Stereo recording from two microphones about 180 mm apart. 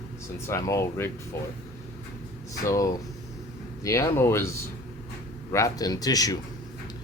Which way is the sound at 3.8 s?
20° left (ahead or behind).